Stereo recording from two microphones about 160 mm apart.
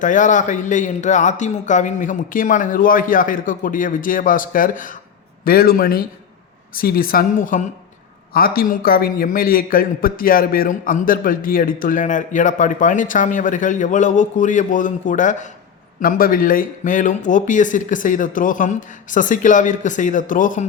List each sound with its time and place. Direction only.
0.0 s a man's voice: 50° left (ahead or behind)
16.0 s speech: 60° left (ahead or behind)